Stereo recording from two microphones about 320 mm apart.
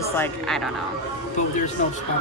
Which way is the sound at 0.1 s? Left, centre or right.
Centre.